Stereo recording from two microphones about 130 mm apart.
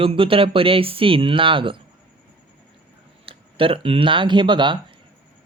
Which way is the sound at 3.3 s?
45° right (ahead or behind).